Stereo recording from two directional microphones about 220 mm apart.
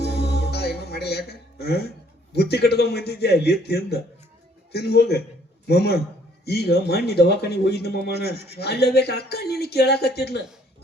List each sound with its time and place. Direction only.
0.1 s music: 45° left (ahead or behind)
2.3 s speech: 45° left (ahead or behind)